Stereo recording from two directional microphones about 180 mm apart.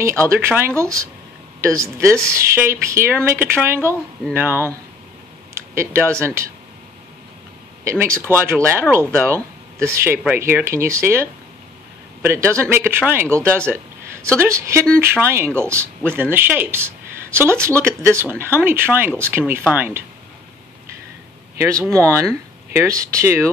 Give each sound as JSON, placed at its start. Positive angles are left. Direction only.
{"t": 0.0, "sound": "speech", "side_deg": -15}
{"t": 7.8, "sound": "speech", "side_deg": -15}
{"t": 21.9, "sound": "speech", "side_deg": -15}